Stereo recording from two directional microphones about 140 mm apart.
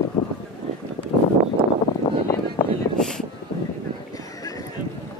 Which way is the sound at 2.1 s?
40° left (ahead or behind).